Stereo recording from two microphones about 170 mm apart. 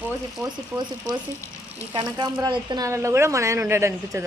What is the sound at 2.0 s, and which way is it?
Speech, 25° right (ahead or behind).